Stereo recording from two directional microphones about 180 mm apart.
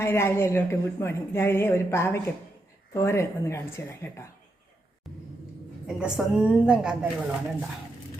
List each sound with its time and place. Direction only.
0.0 s speech: 15° left (ahead or behind)
6.0 s a woman's voice: 5° right (ahead or behind)